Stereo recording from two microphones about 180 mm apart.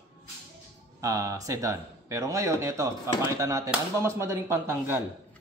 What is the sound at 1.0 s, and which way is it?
A man's voice, 20° right (ahead or behind).